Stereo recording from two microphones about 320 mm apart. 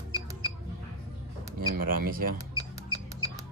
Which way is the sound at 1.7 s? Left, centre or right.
Right.